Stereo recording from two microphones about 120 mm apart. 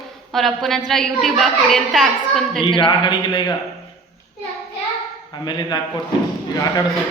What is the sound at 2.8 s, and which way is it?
Speech, 40° left (ahead or behind).